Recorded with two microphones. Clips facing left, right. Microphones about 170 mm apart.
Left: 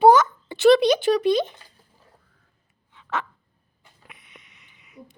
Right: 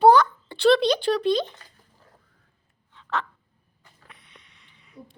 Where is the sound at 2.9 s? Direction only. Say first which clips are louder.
Even; 5° left (ahead or behind).